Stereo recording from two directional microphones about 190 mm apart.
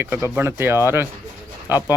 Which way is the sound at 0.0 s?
10° right (ahead or behind).